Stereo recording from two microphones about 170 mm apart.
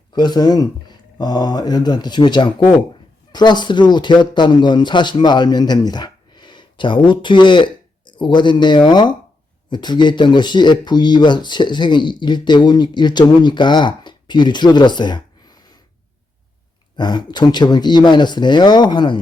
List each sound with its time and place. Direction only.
0.1 s speech: 25° left (ahead or behind)
17.0 s speech: 25° left (ahead or behind)